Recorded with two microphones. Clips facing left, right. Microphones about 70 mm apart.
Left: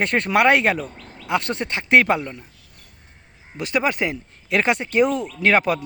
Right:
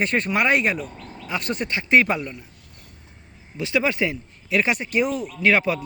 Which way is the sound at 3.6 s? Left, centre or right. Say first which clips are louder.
Even; left.